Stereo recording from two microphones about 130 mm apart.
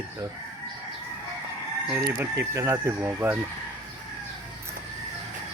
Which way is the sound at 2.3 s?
25° right (ahead or behind).